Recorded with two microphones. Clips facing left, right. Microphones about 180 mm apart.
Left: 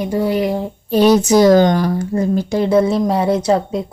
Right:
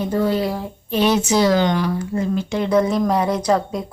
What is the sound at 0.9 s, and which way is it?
A woman's voice, 40° left (ahead or behind).